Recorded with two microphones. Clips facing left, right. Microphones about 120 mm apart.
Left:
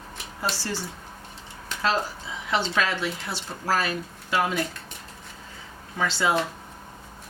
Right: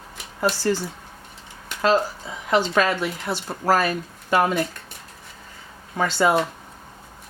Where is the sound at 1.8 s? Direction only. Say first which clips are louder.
Right 6 dB; 45° right (ahead or behind).